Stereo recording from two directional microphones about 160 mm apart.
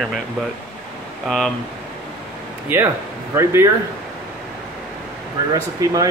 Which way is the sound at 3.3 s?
15° right (ahead or behind).